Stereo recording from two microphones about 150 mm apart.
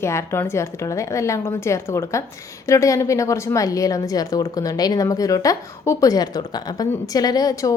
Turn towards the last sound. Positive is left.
turn(degrees=25)  # may be behind; listen again after turning